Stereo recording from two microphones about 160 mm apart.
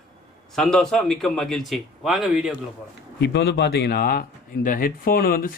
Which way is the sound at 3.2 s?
90° left.